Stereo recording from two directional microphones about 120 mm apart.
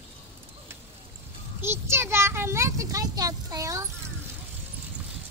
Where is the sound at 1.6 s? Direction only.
20° right (ahead or behind).